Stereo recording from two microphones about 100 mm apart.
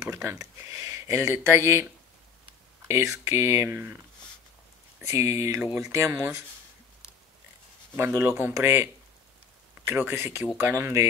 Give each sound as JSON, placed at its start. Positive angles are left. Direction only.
{"t": 0.1, "sound": "speech", "side_deg": -30}
{"t": 2.9, "sound": "speech", "side_deg": -30}
{"t": 5.0, "sound": "speech", "side_deg": -30}
{"t": 7.9, "sound": "speech", "side_deg": -20}
{"t": 9.8, "sound": "speech", "side_deg": -20}